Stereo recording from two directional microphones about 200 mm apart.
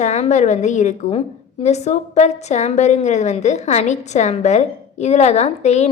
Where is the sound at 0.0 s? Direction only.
35° left (ahead or behind).